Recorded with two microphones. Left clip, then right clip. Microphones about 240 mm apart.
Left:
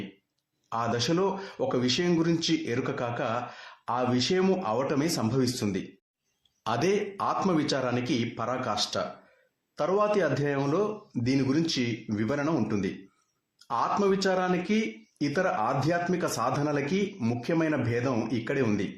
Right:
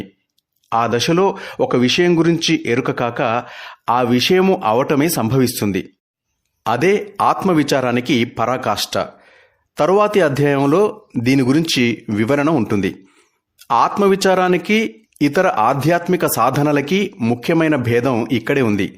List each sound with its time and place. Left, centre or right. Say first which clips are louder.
0.7 s speech: right 12 dB; right